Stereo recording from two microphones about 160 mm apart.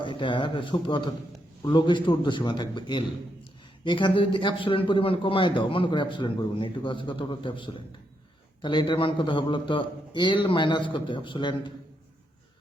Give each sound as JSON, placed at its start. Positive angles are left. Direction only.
{"t": 0.0, "sound": "a man's voice", "side_deg": 30}